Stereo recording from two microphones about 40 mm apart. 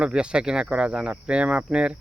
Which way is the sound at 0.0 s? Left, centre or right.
Right.